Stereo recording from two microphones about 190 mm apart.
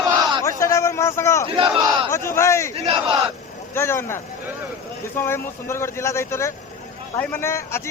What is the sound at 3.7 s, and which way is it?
Speech, 10° left (ahead or behind).